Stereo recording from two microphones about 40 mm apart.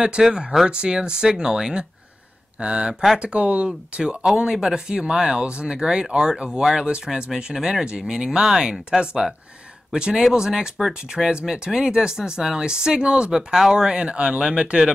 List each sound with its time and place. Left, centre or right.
0.2 s speech: centre
13.3 s speech: centre